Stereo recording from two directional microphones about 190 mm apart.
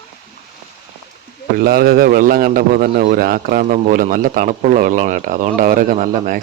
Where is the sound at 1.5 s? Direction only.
55° right (ahead or behind).